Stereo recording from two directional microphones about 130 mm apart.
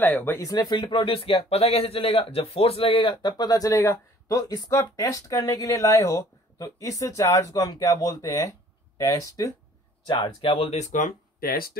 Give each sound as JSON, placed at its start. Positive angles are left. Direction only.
{"t": 0.0, "sound": "speech", "side_deg": 15}
{"t": 0.5, "sound": "a man's voice", "side_deg": 30}
{"t": 10.0, "sound": "speech", "side_deg": 35}